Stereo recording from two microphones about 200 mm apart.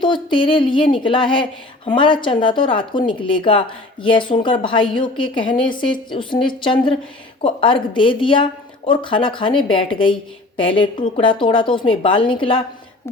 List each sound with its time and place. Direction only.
0.0 s speech: 25° left (ahead or behind)